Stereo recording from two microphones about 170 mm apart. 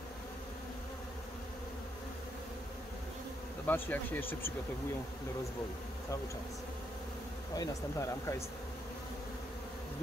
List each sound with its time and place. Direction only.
3.6 s speech: 10° left (ahead or behind)
7.5 s speech: 20° left (ahead or behind)